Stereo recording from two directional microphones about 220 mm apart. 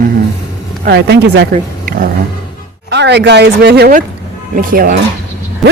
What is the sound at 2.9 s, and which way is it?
Speech, 50° right (ahead or behind).